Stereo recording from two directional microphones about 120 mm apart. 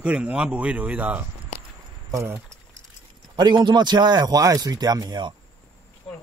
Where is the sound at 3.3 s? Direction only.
35° right (ahead or behind).